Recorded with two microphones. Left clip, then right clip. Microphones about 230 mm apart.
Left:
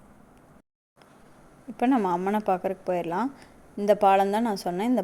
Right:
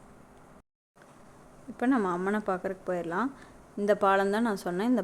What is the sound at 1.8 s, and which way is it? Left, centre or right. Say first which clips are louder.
A woman's voice: left 4 dB; centre.